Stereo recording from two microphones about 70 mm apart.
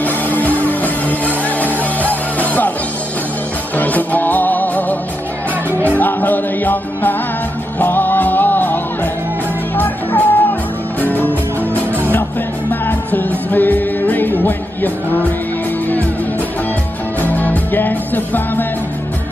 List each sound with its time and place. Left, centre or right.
0.0 s music: left
3.7 s music: left
5.9 s music: left
12.8 s music: left
17.2 s music: left